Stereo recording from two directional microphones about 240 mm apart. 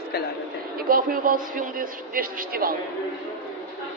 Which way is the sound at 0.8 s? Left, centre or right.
Right.